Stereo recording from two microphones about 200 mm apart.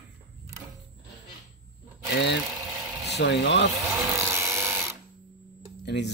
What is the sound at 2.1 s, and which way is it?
A man's voice, 60° left (ahead or behind).